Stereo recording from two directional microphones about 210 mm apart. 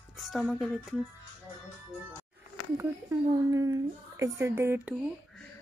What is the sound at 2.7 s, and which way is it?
A woman's voice, 10° right (ahead or behind).